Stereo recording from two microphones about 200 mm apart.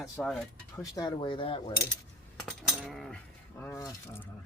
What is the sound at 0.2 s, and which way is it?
Speech, 5° left (ahead or behind).